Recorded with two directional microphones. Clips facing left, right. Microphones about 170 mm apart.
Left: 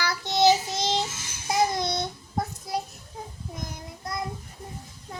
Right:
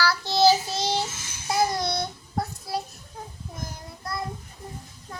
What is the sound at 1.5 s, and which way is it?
Babbling, 20° left (ahead or behind).